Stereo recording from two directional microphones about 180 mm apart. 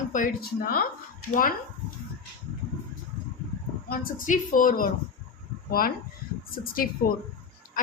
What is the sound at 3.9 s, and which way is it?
A woman's voice, 50° left (ahead or behind).